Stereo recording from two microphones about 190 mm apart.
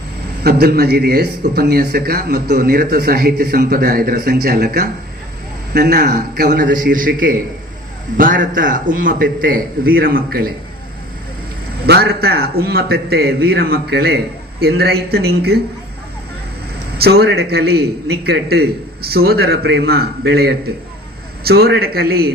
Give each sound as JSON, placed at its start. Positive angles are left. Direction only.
{"t": 0.4, "sound": "a man's voice", "side_deg": -55}
{"t": 6.7, "sound": "a man's voice", "side_deg": -45}
{"t": 11.9, "sound": "a man's voice", "side_deg": -55}
{"t": 17.0, "sound": "a man's voice", "side_deg": -55}